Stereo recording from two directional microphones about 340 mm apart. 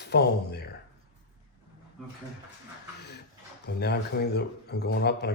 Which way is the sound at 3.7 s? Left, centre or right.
Left.